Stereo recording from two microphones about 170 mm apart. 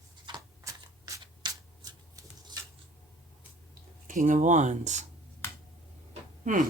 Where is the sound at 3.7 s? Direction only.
50° right (ahead or behind).